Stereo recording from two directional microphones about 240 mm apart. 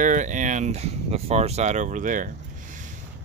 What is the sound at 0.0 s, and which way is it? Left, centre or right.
Speech, right.